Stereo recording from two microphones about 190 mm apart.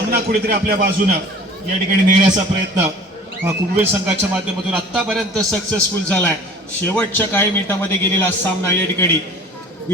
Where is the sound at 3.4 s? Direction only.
10° right (ahead or behind).